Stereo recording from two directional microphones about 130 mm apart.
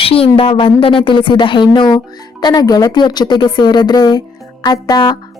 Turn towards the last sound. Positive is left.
turn(degrees=30)  # may be behind; listen again after turning